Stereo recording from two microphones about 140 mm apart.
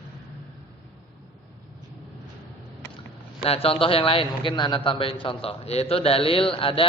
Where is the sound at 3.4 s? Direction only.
45° left (ahead or behind).